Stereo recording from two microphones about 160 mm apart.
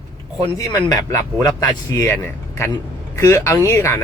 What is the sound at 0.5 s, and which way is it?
Speech, 20° left (ahead or behind).